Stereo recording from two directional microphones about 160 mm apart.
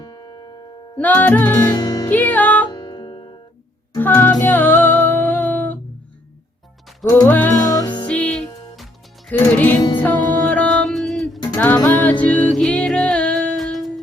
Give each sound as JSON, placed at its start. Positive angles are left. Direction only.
{"t": 0.0, "sound": "music", "side_deg": 25}
{"t": 0.9, "sound": "music", "side_deg": 10}
{"t": 1.5, "sound": "music", "side_deg": 25}
{"t": 2.0, "sound": "music", "side_deg": 10}
{"t": 2.6, "sound": "music", "side_deg": 25}
{"t": 3.9, "sound": "music", "side_deg": 10}
{"t": 7.2, "sound": "music", "side_deg": 10}
{"t": 7.8, "sound": "music", "side_deg": 30}
{"t": 8.0, "sound": "music", "side_deg": 10}
{"t": 9.4, "sound": "music", "side_deg": 10}